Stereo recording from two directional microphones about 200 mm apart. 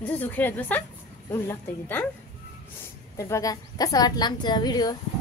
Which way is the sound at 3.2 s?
15° left (ahead or behind).